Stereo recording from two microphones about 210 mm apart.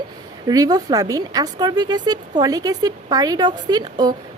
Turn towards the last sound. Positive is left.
turn(degrees=-20)  # may be behind; listen again after turning